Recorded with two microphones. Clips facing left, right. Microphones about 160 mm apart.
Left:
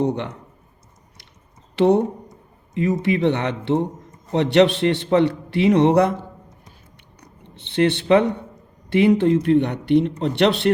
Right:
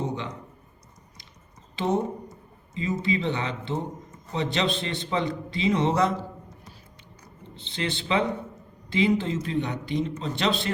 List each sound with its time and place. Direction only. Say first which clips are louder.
0.0 s a man's voice: left 9 dB; 65° left (ahead or behind)
1.7 s a man's voice: left 9 dB; 70° left (ahead or behind)
7.7 s speech: left 11 dB; 65° left (ahead or behind)